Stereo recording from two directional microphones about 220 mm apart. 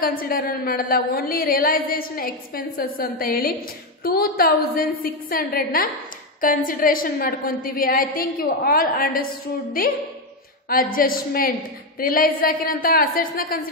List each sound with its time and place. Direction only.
0.0 s a woman's voice: 40° left (ahead or behind)
11.0 s a woman's voice: 40° left (ahead or behind)